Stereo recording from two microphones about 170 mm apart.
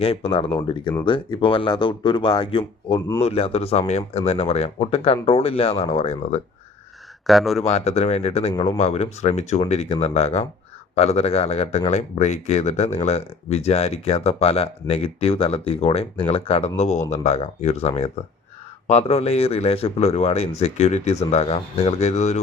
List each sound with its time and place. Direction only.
0.0 s speech: 35° left (ahead or behind)
7.3 s speech: centre (ahead or behind)
7.7 s speech: 40° left (ahead or behind)